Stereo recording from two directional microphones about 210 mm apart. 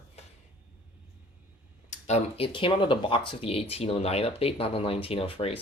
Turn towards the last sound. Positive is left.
turn(degrees=25)  # may be behind; listen again after turning